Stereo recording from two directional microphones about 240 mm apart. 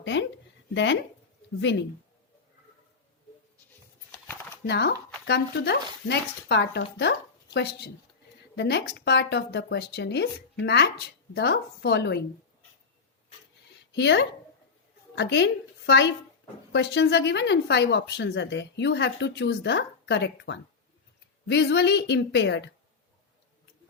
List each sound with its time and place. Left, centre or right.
0.0 s a sound: left
0.7 s speech: left
4.6 s speech: left
13.9 s a woman's voice: left